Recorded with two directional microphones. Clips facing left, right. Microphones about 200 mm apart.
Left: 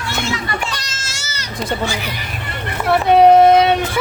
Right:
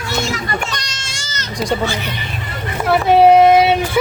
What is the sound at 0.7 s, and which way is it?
Goat, 5° left (ahead or behind).